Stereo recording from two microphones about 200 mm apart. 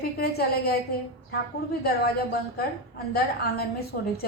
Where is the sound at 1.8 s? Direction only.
50° left (ahead or behind).